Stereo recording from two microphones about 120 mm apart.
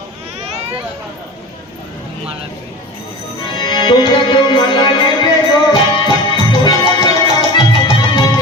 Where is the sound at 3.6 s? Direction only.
40° left (ahead or behind).